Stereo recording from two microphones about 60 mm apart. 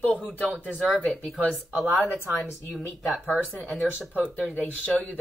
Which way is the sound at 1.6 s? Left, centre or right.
Centre.